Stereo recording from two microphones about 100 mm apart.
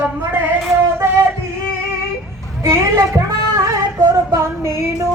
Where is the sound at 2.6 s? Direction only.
30° right (ahead or behind).